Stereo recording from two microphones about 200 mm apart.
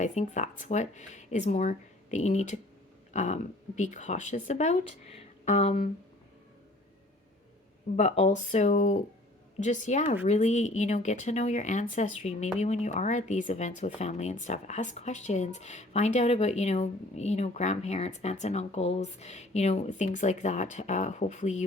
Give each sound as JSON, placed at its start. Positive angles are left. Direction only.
{"t": 0.0, "sound": "speech", "side_deg": 35}
{"t": 7.9, "sound": "speech", "side_deg": 35}